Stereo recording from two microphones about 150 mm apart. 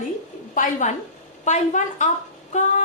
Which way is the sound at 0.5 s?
55° left (ahead or behind).